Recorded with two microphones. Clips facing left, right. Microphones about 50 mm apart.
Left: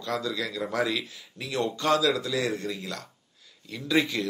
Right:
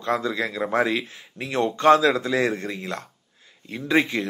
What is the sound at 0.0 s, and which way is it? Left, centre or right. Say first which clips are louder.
Speech: right 6 dB; right.